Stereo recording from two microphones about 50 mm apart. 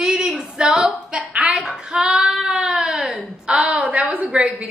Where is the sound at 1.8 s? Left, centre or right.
Centre.